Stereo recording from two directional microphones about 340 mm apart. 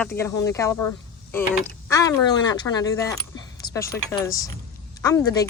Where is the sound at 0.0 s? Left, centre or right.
Centre.